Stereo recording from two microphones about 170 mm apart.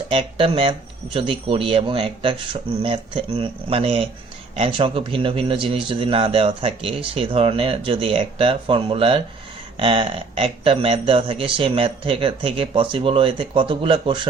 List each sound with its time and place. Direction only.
0.1 s a man's voice: 30° right (ahead or behind)